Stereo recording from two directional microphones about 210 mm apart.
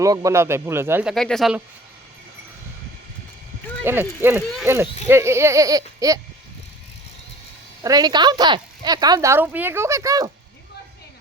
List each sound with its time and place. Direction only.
0.0 s a woman's voice: 15° right (ahead or behind)
1.1 s speech: centre (ahead or behind)
3.9 s a woman's voice: 10° right (ahead or behind)
7.8 s a woman's voice: 20° right (ahead or behind)